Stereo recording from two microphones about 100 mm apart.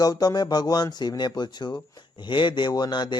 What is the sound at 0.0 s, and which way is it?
Speech, 40° left (ahead or behind).